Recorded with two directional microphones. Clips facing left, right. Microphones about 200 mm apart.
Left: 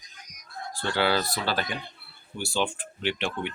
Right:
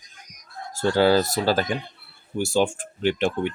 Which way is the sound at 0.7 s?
40° right (ahead or behind).